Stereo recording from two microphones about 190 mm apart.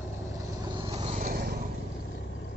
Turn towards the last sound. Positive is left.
turn(degrees=-50)  # may be behind; listen again after turning